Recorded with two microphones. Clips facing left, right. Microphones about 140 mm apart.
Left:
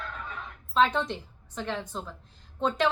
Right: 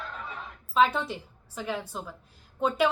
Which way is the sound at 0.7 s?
5° right (ahead or behind).